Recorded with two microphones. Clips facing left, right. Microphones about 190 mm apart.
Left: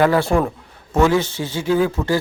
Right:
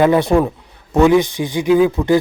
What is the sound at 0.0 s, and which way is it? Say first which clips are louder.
Speech: right 3 dB; 20° right (ahead or behind).